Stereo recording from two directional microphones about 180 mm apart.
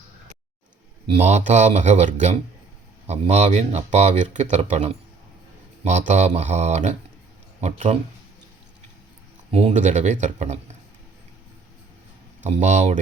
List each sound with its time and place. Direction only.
1.0 s speech: 35° right (ahead or behind)
9.5 s speech: 35° right (ahead or behind)
12.4 s speech: 40° right (ahead or behind)